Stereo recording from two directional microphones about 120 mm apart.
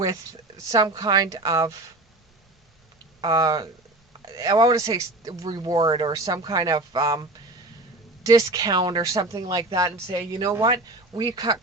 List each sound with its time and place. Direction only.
0.0 s speech: 30° right (ahead or behind)
3.2 s speech: 35° right (ahead or behind)